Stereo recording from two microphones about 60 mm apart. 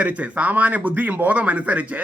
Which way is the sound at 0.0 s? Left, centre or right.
Right.